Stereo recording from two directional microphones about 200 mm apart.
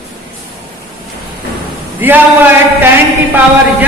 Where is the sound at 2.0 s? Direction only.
10° right (ahead or behind).